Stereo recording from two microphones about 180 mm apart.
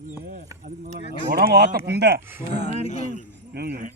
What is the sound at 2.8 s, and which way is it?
Speech, 40° left (ahead or behind).